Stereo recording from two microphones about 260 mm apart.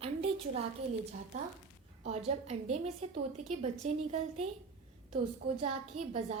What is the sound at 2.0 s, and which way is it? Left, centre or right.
A woman's voice, right.